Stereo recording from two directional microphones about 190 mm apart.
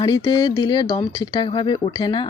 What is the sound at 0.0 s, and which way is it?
Speech, 25° left (ahead or behind).